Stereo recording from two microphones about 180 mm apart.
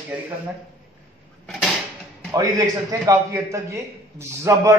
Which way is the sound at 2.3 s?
20° right (ahead or behind).